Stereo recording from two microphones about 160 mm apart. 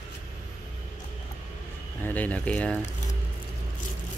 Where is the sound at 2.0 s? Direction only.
10° left (ahead or behind).